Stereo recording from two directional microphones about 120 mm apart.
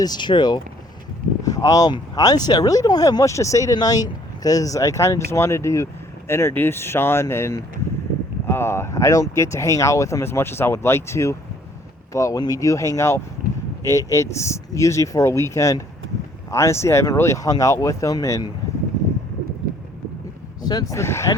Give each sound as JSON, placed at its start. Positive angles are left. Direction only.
{"t": 0.0, "sound": "speech", "side_deg": 35}
{"t": 20.6, "sound": "speech", "side_deg": 35}
{"t": 21.0, "sound": "speech", "side_deg": 25}